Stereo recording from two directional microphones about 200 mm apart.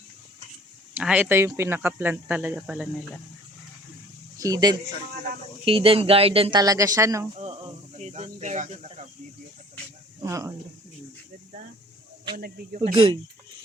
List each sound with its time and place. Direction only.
0.9 s speech: 10° right (ahead or behind)
4.4 s speech: 15° right (ahead or behind)
7.3 s speech: 35° right (ahead or behind)
10.2 s speech: 15° right (ahead or behind)
12.4 s speech: 45° right (ahead or behind)
12.9 s speech: 25° right (ahead or behind)